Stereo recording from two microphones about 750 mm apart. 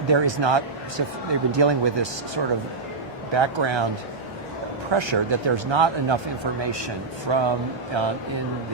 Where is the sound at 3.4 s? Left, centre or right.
Right.